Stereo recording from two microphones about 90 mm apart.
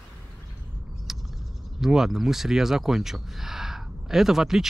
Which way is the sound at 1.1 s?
5° right (ahead or behind).